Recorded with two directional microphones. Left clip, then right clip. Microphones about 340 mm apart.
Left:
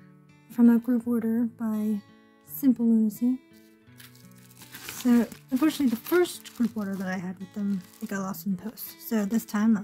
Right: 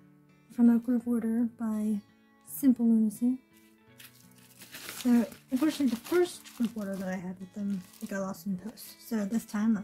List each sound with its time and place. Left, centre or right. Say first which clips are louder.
0.5 s speech: left 4 dB; centre
4.9 s speech: left 4 dB; centre